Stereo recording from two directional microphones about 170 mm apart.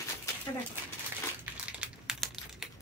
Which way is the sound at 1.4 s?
5° right (ahead or behind).